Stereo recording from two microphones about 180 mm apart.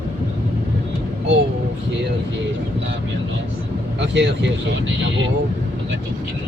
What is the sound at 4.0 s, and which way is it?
Speech, 75° right (ahead or behind).